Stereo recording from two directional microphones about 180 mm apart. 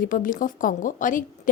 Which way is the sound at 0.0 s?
50° left (ahead or behind).